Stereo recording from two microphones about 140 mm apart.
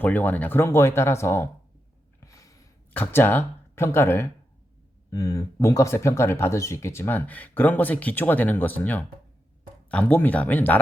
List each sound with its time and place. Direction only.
0.0 s speech: 15° left (ahead or behind)
2.2 s a sound: 25° left (ahead or behind)
2.9 s speech: 15° left (ahead or behind)